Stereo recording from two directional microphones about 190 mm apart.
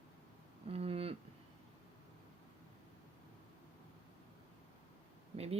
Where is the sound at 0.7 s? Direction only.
30° right (ahead or behind).